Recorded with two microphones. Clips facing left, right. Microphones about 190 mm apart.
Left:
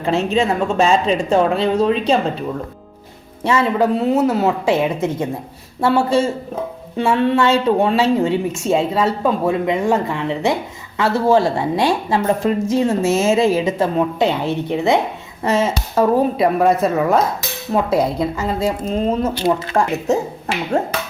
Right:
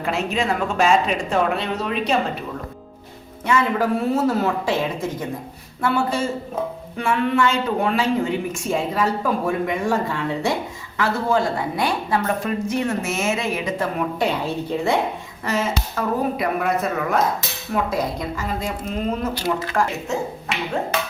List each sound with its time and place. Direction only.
0.0 s speech: 30° left (ahead or behind)
3.4 s speech: 25° left (ahead or behind)
20.1 s speech: 40° left (ahead or behind)